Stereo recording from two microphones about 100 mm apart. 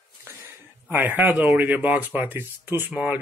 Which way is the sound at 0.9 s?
20° right (ahead or behind).